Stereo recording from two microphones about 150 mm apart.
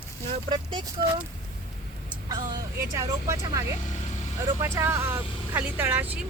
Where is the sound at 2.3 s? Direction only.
25° right (ahead or behind).